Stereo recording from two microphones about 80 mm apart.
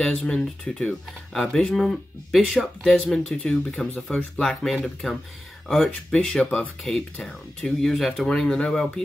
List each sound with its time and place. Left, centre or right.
0.0 s speech: centre
6.8 s speech: centre